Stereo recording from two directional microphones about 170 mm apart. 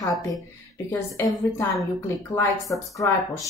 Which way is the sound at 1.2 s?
20° left (ahead or behind).